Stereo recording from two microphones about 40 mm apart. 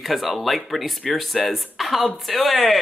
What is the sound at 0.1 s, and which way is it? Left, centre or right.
Speech, centre.